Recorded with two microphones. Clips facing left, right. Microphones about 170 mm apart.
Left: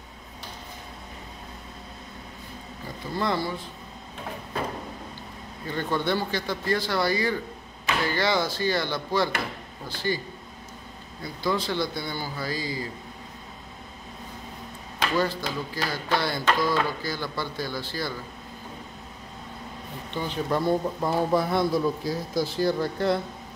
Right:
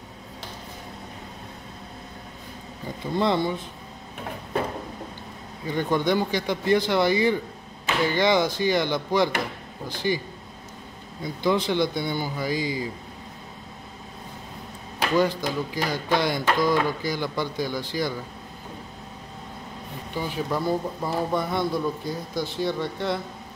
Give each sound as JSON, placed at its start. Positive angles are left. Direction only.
{"t": 3.2, "sound": "speech", "side_deg": -20}
{"t": 5.7, "sound": "speech", "side_deg": -15}
{"t": 11.2, "sound": "speech", "side_deg": -20}
{"t": 15.0, "sound": "speech", "side_deg": -15}
{"t": 20.4, "sound": "a man's voice", "side_deg": 0}